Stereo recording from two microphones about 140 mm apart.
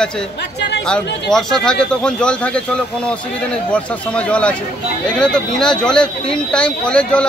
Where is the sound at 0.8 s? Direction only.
5° left (ahead or behind).